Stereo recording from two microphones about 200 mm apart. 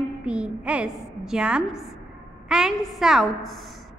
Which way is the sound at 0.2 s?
5° right (ahead or behind).